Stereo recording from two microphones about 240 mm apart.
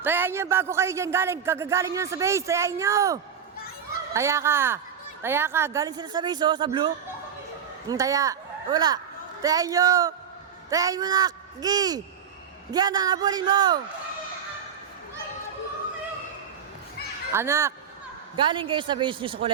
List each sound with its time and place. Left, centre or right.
0.0 s speech: centre
17.3 s speech: centre